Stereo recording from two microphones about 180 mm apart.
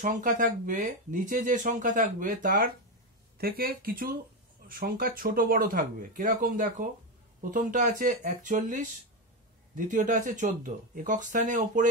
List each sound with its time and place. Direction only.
0.0 s speech: 45° right (ahead or behind)
9.8 s speech: 45° right (ahead or behind)